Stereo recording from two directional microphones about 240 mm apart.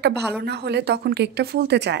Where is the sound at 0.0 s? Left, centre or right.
Right.